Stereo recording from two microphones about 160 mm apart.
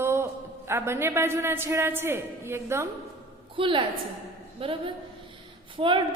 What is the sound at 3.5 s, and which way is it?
A woman's voice, 30° right (ahead or behind).